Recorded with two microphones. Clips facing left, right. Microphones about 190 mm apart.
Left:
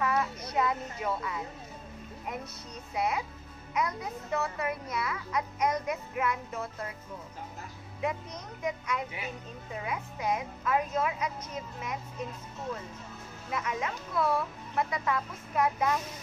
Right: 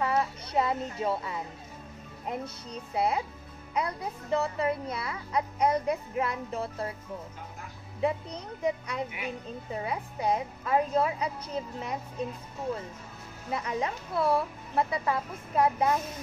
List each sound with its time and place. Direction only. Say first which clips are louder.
0.0 s music: right 1 dB; 30° right (ahead or behind)
2.2 s speech: right 5 dB; 30° right (ahead or behind)
8.0 s speech: right 4 dB; 30° right (ahead or behind)
13.5 s speech: right 2 dB; 35° right (ahead or behind)